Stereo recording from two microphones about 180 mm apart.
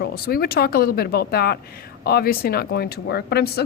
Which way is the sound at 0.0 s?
60° left (ahead or behind).